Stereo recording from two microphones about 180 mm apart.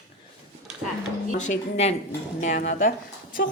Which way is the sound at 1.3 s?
40° left (ahead or behind).